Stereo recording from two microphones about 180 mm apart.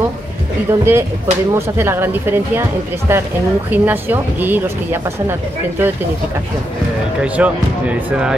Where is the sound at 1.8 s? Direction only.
10° right (ahead or behind).